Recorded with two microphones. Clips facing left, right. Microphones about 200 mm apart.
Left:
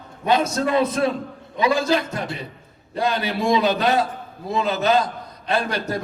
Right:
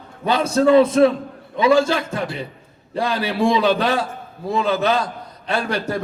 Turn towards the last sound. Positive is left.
turn(degrees=-30)  # may be behind; listen again after turning